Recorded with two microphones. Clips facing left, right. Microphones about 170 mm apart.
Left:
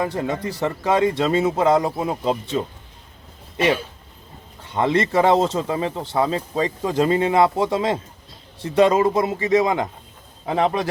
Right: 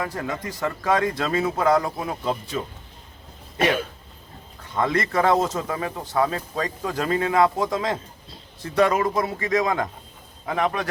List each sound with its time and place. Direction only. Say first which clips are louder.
0.0 s speech: left 5 dB; 25° left (ahead or behind)
4.7 s speech: left 4 dB; 25° left (ahead or behind)